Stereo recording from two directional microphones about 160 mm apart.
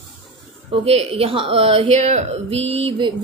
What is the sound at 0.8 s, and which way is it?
A woman's voice, 35° right (ahead or behind).